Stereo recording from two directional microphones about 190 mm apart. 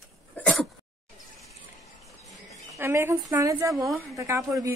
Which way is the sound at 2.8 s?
15° right (ahead or behind).